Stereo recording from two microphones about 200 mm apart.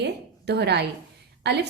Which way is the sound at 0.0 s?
55° right (ahead or behind).